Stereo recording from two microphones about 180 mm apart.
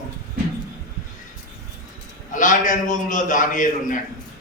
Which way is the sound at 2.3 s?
45° left (ahead or behind).